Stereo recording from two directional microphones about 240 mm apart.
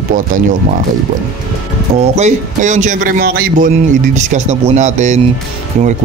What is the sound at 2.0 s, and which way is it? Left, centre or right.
A man's voice, right.